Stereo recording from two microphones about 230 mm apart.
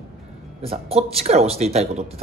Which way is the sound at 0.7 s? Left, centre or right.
Right.